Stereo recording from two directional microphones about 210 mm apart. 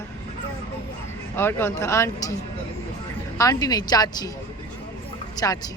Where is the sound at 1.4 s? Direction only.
10° left (ahead or behind).